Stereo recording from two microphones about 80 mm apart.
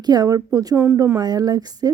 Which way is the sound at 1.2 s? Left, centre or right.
Right.